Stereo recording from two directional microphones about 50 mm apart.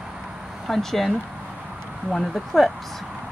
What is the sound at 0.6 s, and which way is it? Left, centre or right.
Speech, centre.